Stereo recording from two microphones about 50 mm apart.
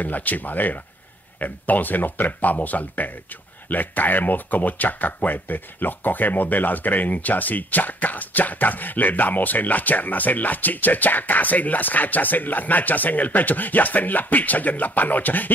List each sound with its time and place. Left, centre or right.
0.0 s speech: left